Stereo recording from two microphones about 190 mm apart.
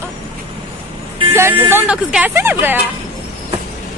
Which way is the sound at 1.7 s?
10° right (ahead or behind).